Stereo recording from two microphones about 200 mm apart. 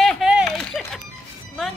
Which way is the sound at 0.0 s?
Centre (ahead or behind).